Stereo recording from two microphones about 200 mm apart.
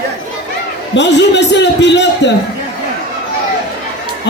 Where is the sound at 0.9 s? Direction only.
60° left (ahead or behind).